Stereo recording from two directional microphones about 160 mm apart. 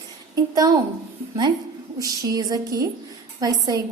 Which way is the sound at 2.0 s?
20° right (ahead or behind).